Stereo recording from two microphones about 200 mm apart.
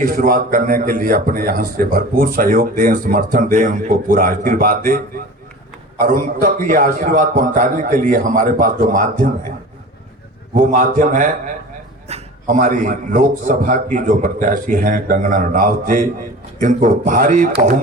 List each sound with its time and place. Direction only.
0.0 s a man's voice: 45° right (ahead or behind)
10.5 s a man's voice: 40° right (ahead or behind)